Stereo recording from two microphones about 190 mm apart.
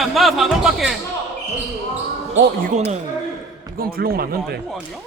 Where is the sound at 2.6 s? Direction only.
40° right (ahead or behind).